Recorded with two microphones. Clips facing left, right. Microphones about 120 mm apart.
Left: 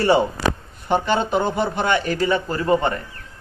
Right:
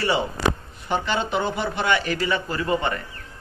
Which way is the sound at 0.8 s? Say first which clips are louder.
Left 5 dB; 45° left (ahead or behind).